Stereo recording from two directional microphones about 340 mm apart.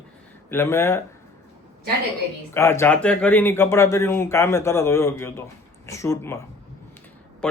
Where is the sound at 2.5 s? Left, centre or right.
Centre.